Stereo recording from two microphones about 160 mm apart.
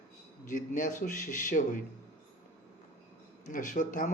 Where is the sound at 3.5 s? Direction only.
55° left (ahead or behind).